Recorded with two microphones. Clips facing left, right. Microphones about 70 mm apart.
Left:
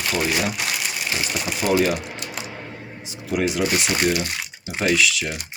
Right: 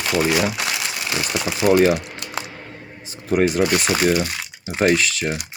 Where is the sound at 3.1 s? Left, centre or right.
Right.